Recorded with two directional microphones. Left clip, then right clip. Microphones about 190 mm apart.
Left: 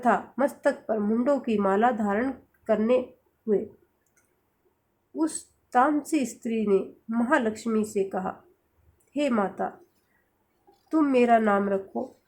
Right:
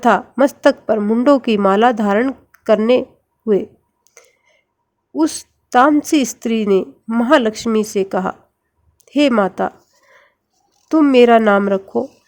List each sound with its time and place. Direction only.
0.0 s a woman's voice: 45° right (ahead or behind)
5.1 s a woman's voice: 45° right (ahead or behind)
10.8 s a woman's voice: 45° right (ahead or behind)